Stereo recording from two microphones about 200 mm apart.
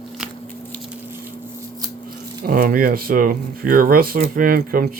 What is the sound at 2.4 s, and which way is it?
Speech, 45° right (ahead or behind).